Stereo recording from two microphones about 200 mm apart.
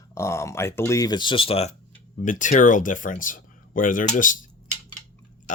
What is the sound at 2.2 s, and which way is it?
Speech, 40° left (ahead or behind).